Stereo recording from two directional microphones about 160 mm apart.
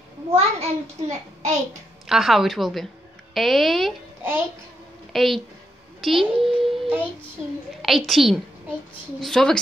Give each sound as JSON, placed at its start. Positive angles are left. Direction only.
{"t": 0.3, "sound": "a child's voice", "side_deg": -40}
{"t": 2.0, "sound": "a child's voice", "side_deg": 0}
{"t": 5.1, "sound": "a woman's voice", "side_deg": 0}